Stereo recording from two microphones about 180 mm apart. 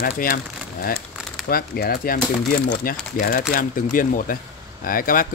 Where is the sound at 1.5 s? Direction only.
55° left (ahead or behind).